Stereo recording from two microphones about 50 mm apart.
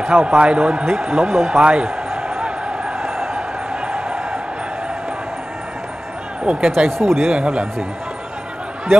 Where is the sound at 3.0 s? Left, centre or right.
Centre.